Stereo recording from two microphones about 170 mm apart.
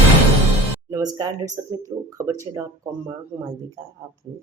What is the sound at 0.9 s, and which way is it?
Speech, 20° right (ahead or behind).